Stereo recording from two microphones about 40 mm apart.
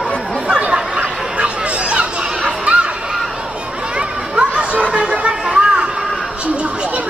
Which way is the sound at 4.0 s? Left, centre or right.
Right.